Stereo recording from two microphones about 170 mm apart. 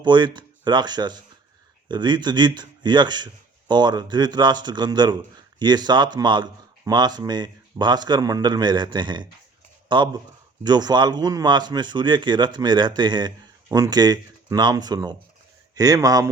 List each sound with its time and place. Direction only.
0.0 s speech: 25° right (ahead or behind)